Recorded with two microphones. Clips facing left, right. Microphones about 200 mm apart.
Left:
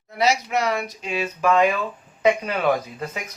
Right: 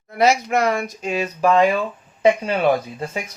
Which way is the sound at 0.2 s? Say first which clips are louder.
Right 4 dB; 50° right (ahead or behind).